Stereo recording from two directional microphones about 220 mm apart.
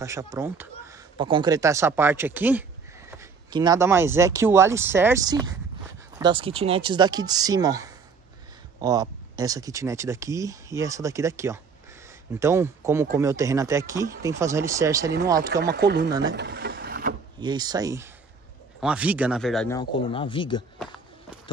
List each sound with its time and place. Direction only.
0.0 s speech: 15° right (ahead or behind)
15.5 s speech: 50° right (ahead or behind)
16.1 s speech: 15° right (ahead or behind)
16.3 s a sound: 50° right (ahead or behind)
17.4 s speech: 20° right (ahead or behind); by 19.7 s centre (ahead or behind)
19.7 s speech: 20° left (ahead or behind)